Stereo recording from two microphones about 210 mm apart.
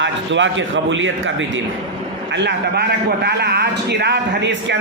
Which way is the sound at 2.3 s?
50° right (ahead or behind).